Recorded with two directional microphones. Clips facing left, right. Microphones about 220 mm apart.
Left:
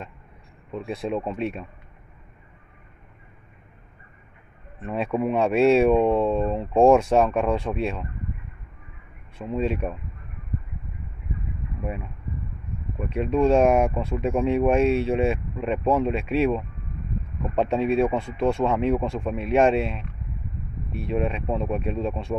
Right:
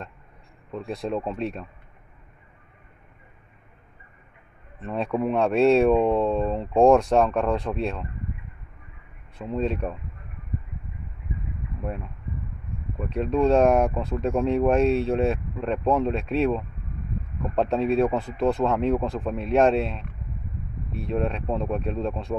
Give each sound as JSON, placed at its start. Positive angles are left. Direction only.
{"t": 0.7, "sound": "speech", "side_deg": 0}
{"t": 4.8, "sound": "speech", "side_deg": 0}
{"t": 9.4, "sound": "speech", "side_deg": 0}
{"t": 11.8, "sound": "speech", "side_deg": 5}